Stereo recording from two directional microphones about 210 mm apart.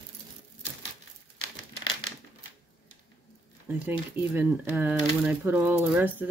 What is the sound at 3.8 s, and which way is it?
Speech, 10° right (ahead or behind).